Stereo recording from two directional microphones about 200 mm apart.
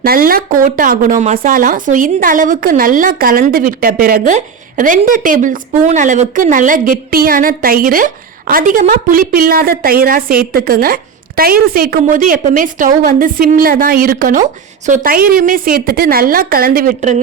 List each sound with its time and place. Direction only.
0.0 s speech: 45° right (ahead or behind)